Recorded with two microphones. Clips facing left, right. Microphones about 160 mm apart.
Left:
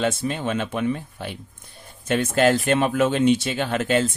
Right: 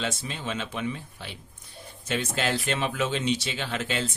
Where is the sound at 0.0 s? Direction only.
55° left (ahead or behind).